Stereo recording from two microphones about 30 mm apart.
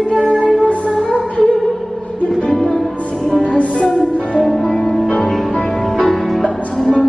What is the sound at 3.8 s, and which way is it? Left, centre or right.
Music, left.